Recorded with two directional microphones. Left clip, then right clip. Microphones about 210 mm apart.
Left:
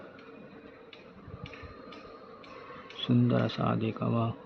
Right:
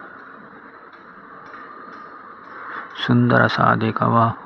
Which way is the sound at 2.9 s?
20° right (ahead or behind).